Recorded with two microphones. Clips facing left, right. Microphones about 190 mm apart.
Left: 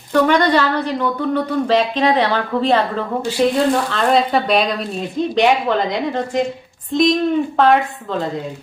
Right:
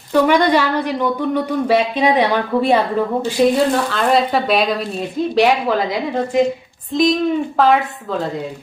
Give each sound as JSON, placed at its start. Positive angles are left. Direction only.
{"t": 0.1, "sound": "speech", "side_deg": -10}